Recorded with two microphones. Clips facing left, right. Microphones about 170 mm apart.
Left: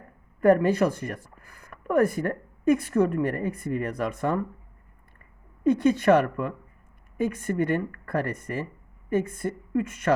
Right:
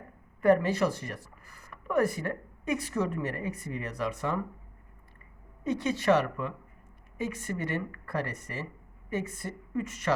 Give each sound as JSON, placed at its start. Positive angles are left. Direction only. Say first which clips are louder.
{"t": 0.4, "sound": "speech", "louder": "left 4 dB", "side_deg": 50}
{"t": 5.6, "sound": "speech", "louder": "left 7 dB", "side_deg": 50}